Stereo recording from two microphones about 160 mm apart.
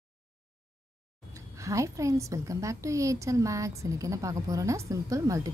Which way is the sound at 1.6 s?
20° right (ahead or behind).